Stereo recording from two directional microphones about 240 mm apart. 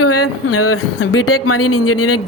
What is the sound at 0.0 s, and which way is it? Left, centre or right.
Speech, left.